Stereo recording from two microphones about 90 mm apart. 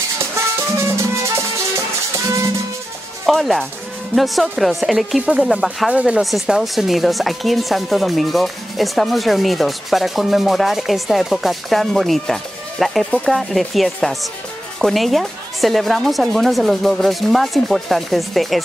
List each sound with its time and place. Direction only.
0.4 s music: 30° right (ahead or behind)
3.3 s speech: 5° left (ahead or behind)